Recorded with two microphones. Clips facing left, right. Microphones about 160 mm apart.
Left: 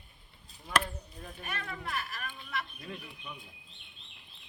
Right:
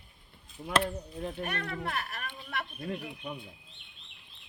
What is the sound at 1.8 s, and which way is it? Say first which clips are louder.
Speech: right 3 dB; 55° right (ahead or behind).